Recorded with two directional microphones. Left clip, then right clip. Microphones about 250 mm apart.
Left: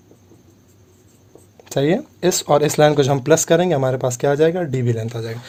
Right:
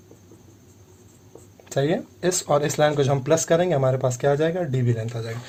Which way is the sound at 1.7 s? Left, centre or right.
Left.